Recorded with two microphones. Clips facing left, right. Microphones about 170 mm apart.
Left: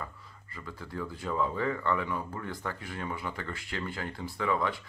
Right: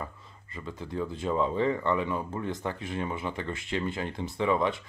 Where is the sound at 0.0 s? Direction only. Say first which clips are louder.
Right 3 dB; 25° right (ahead or behind).